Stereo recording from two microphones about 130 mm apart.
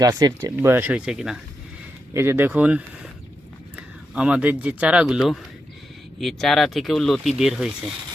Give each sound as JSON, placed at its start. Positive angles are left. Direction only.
{"t": 0.0, "sound": "speech", "side_deg": -30}
{"t": 0.6, "sound": "speech", "side_deg": -15}
{"t": 2.1, "sound": "speech", "side_deg": -20}